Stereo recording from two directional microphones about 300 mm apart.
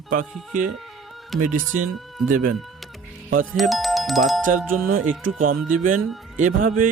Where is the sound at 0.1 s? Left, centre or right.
Right.